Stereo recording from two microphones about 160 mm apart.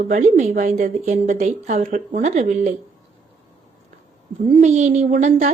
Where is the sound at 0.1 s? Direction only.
50° right (ahead or behind).